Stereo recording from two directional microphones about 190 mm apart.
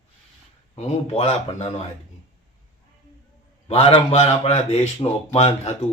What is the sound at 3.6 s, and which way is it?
A man's voice, 30° left (ahead or behind).